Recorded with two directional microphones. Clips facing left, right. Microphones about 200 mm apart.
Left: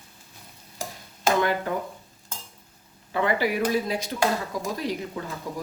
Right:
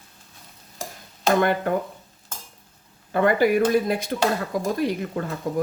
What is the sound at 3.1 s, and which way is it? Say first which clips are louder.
Speech: right 6 dB; 50° right (ahead or behind).